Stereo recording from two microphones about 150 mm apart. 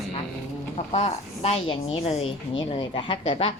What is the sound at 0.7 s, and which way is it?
A woman's voice, 45° left (ahead or behind).